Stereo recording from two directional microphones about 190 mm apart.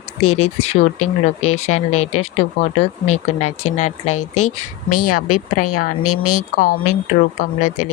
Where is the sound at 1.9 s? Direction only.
90° left.